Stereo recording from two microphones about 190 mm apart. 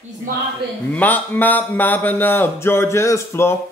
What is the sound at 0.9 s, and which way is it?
Speech, 10° left (ahead or behind).